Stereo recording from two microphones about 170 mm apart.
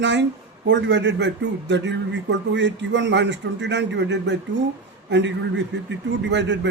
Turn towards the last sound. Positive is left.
turn(degrees=-90)